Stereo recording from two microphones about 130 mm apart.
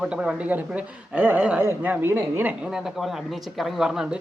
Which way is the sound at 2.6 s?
5° right (ahead or behind).